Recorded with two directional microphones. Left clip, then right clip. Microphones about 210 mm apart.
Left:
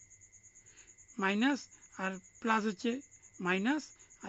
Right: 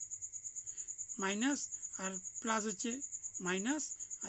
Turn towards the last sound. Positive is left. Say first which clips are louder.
# left 5 dB
turn(degrees=15)  # may be behind; listen again after turning